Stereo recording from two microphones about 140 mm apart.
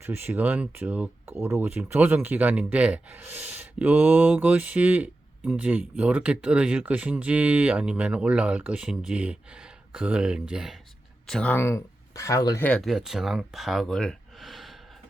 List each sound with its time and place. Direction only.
0.0 s speech: 15° right (ahead or behind); by 11.5 s 5° left (ahead or behind)
11.5 s speech: 20° left (ahead or behind)
12.6 s speech: 5° left (ahead or behind)